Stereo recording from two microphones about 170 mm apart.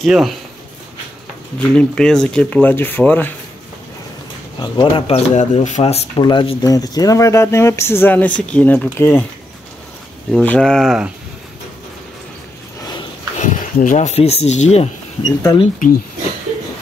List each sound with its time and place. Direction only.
0.0 s speech: centre (ahead or behind)
1.6 s speech: 5° left (ahead or behind)
4.6 s speech: 30° left (ahead or behind); by 9.2 s 15° left (ahead or behind)
10.3 s speech: 5° left (ahead or behind)
13.4 s speech: 50° left (ahead or behind)
15.2 s speech: 25° left (ahead or behind)